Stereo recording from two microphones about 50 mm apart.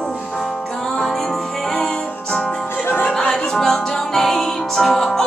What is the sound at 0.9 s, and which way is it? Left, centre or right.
Music, centre.